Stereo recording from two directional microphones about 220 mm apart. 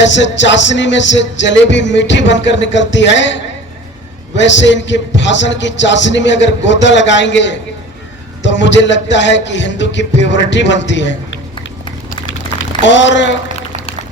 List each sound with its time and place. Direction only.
0.0 s music: 55° left (ahead or behind)
12.8 s music: 55° left (ahead or behind)